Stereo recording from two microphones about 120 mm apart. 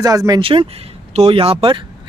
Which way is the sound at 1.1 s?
60° right (ahead or behind).